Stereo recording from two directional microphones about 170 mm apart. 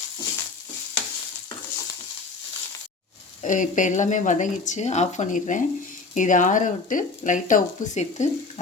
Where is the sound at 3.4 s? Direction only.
50° left (ahead or behind).